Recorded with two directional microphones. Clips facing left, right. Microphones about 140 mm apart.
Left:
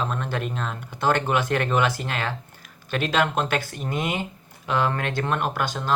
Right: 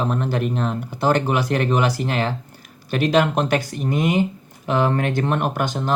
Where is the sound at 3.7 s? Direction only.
30° right (ahead or behind).